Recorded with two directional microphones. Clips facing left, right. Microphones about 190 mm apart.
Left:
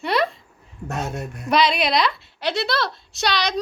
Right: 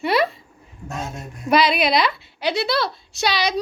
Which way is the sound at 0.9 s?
65° left (ahead or behind).